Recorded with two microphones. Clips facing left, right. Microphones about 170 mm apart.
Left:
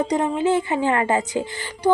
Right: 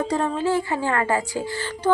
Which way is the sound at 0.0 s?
20° left (ahead or behind).